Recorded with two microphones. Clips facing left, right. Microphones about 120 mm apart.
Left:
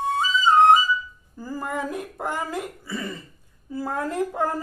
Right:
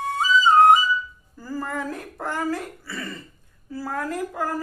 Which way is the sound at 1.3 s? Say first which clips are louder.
Even; 15° left (ahead or behind).